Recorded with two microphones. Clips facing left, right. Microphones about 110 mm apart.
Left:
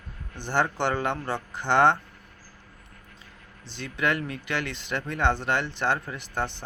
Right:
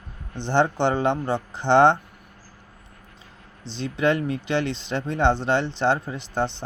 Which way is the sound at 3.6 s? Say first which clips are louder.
Right 5 dB; 25° right (ahead or behind).